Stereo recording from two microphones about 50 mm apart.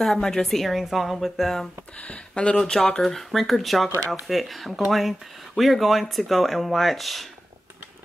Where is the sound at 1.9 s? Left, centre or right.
Left.